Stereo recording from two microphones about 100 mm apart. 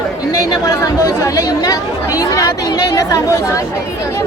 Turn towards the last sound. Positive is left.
turn(degrees=35)  # may be behind; listen again after turning